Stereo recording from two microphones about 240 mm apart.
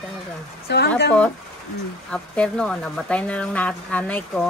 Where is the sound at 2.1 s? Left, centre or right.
Centre.